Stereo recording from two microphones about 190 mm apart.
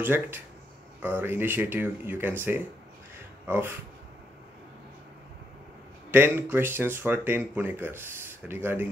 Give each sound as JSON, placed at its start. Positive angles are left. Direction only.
{"t": 0.0, "sound": "speech", "side_deg": -10}
{"t": 6.1, "sound": "speech", "side_deg": -10}